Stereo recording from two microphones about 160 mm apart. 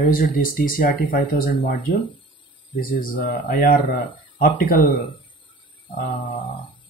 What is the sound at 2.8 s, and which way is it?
Speech, 60° left (ahead or behind).